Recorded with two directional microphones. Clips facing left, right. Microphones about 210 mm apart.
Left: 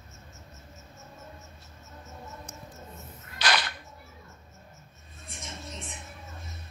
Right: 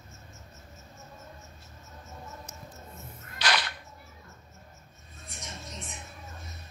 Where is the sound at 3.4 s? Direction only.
50° left (ahead or behind).